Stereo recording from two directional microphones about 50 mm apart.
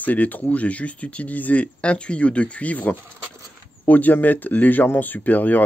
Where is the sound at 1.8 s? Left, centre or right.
Left.